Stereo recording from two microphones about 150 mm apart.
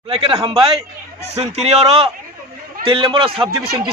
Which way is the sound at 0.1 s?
40° right (ahead or behind).